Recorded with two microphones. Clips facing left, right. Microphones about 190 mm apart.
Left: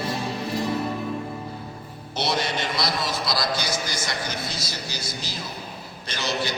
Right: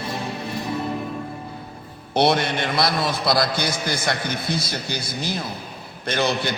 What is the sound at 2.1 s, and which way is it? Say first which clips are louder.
A man's voice: right 7 dB; 55° right (ahead or behind).